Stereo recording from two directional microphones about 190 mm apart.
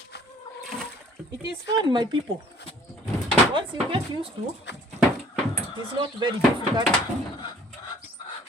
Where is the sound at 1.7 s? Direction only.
25° right (ahead or behind).